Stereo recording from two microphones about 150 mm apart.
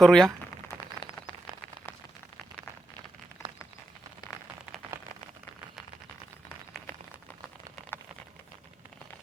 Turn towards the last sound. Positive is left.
turn(degrees=20)  # may be behind; listen again after turning